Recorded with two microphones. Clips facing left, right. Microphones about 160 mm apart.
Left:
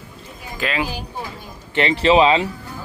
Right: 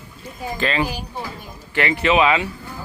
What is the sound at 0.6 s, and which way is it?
Speech, 5° left (ahead or behind).